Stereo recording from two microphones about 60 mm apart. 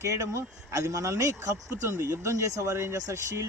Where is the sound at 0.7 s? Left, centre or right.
Right.